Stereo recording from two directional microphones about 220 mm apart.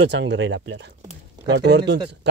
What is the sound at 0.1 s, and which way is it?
Speech, 55° right (ahead or behind).